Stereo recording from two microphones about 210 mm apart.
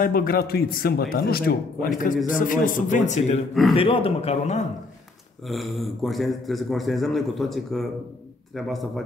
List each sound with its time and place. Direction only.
0.0 s a man's voice: 45° left (ahead or behind)
5.5 s a man's voice: centre (ahead or behind)